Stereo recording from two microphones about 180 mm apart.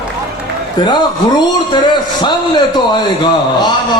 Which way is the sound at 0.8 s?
25° left (ahead or behind).